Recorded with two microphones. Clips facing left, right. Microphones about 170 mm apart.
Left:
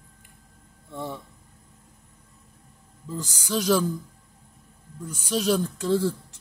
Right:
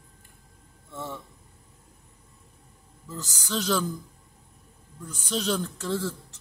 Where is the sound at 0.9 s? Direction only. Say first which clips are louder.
Left 3 dB; 15° left (ahead or behind).